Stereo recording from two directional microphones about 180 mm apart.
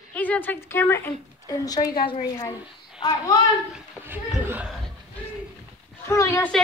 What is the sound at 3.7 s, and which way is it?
Speech, 5° right (ahead or behind).